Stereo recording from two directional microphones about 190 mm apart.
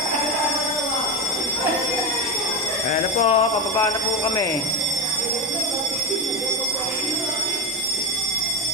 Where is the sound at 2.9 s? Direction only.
35° left (ahead or behind).